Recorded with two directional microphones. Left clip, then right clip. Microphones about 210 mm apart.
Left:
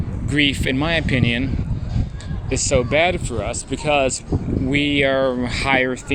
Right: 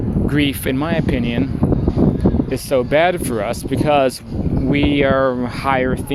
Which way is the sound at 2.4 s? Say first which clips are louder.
Left 3 dB; 15° right (ahead or behind).